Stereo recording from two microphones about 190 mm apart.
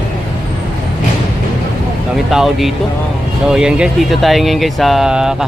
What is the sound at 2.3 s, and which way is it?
Speech, centre (ahead or behind).